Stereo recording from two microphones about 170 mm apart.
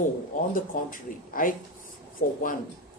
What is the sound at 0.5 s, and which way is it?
A woman's voice, 55° left (ahead or behind).